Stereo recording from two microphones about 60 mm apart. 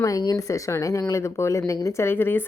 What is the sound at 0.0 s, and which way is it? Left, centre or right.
Speech, left.